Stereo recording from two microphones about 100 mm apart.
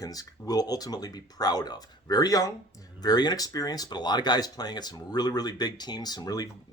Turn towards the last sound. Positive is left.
turn(degrees=40)  # may be behind; listen again after turning